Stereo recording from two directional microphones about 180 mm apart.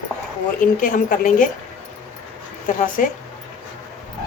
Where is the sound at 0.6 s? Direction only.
50° left (ahead or behind).